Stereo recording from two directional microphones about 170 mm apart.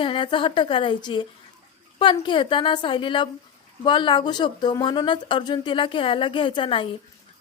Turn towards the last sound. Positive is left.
turn(degrees=30)  # may be behind; listen again after turning